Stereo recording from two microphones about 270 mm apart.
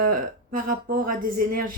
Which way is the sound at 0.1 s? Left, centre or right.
Right.